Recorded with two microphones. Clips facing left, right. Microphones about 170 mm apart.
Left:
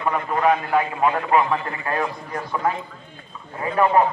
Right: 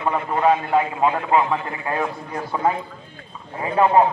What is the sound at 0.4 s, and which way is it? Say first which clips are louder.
A man's voice: right 2 dB; 25° right (ahead or behind).